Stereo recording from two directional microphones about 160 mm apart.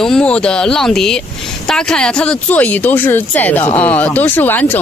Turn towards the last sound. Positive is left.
turn(degrees=10)  # may be behind; listen again after turning